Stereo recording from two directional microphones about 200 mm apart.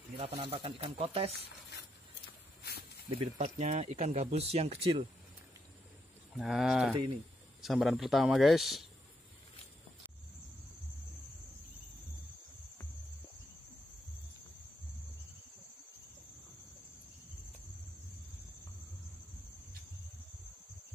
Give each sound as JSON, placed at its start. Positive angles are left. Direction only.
{"t": 0.2, "sound": "speech", "side_deg": -30}
{"t": 3.2, "sound": "speech", "side_deg": -30}
{"t": 6.3, "sound": "speech", "side_deg": 0}